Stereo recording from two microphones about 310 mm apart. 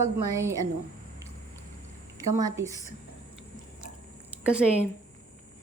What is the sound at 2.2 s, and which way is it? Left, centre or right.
Speech, centre.